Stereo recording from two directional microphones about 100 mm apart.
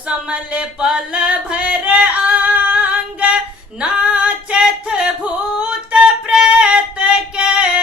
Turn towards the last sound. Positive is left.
turn(degrees=-10)  # may be behind; listen again after turning